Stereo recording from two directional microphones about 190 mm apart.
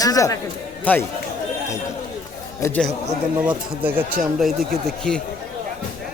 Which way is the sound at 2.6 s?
15° left (ahead or behind).